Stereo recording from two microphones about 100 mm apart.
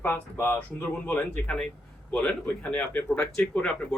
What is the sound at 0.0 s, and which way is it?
A man's voice, 20° left (ahead or behind).